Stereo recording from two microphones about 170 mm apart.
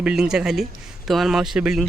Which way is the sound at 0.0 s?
5° right (ahead or behind).